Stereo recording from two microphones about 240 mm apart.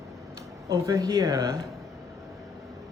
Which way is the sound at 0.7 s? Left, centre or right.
Centre.